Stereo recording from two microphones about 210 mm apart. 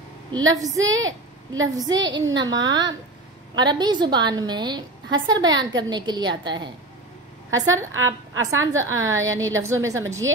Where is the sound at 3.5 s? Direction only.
20° right (ahead or behind).